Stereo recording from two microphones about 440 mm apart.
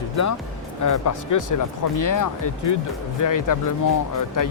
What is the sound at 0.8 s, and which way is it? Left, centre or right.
Speech, left.